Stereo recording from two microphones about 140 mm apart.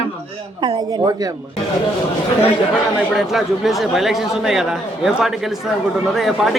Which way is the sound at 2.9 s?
Centre (ahead or behind).